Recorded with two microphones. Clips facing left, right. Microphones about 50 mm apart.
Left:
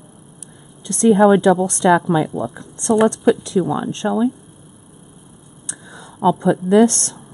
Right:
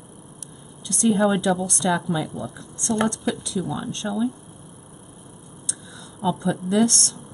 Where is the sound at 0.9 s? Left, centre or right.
Left.